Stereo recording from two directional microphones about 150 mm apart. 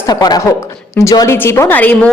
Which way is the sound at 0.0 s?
25° left (ahead or behind).